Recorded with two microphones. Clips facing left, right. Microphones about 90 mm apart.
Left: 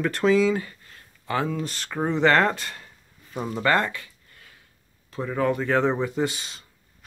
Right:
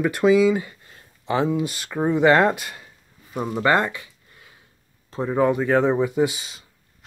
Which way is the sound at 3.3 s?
10° right (ahead or behind).